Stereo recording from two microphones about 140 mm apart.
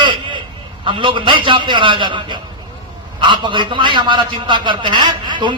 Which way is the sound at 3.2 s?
35° right (ahead or behind).